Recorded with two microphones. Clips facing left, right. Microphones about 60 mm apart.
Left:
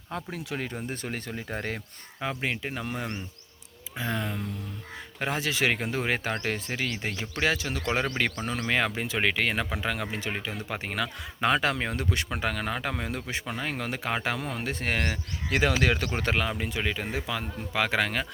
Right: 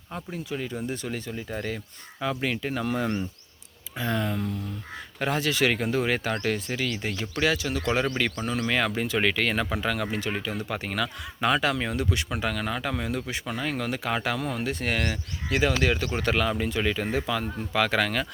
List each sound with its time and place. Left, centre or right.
0.3 s speech: left
0.9 s speech: left
2.4 s speech: centre; by 15.2 s left
15.8 s speech: left
16.2 s speech: left
16.5 s speech: centre